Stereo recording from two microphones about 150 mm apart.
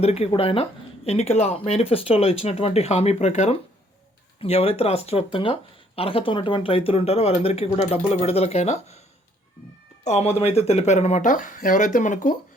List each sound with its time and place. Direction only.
0.0 s speech: 45° left (ahead or behind)
10.0 s speech: 45° left (ahead or behind)